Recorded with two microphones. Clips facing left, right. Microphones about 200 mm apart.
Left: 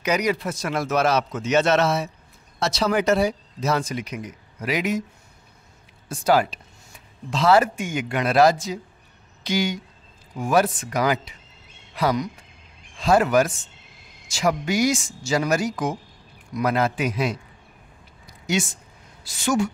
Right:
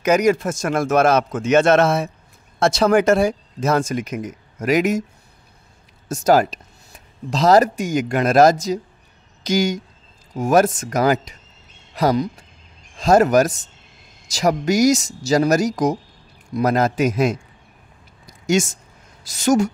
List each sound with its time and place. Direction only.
0.0 s speech: 45° right (ahead or behind)
6.0 s speech: 45° right (ahead or behind)
18.5 s speech: 45° right (ahead or behind)